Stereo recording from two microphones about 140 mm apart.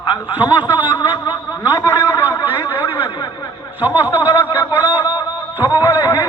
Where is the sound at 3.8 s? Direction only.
15° right (ahead or behind).